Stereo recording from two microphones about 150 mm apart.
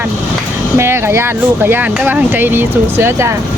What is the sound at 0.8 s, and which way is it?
Speech, 15° right (ahead or behind).